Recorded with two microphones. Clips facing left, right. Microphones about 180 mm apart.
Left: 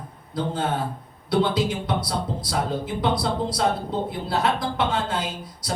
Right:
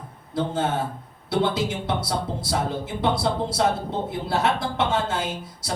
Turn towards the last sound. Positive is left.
turn(degrees=-25)  # may be behind; listen again after turning